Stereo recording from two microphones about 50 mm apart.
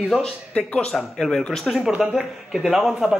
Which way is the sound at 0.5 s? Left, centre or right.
Left.